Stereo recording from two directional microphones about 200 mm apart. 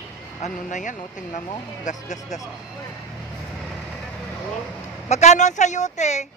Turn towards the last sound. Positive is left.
turn(degrees=35)  # may be behind; listen again after turning